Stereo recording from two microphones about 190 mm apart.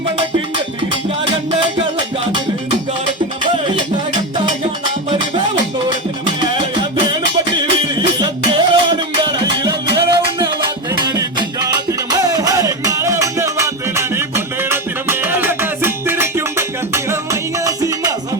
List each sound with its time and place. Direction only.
6.4 s music: 25° right (ahead or behind)